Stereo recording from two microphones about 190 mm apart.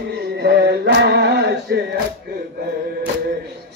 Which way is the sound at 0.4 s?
55° right (ahead or behind).